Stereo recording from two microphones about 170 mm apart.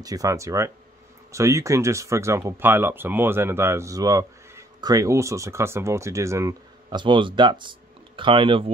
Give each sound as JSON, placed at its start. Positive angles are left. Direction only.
{"t": 0.0, "sound": "speech", "side_deg": -20}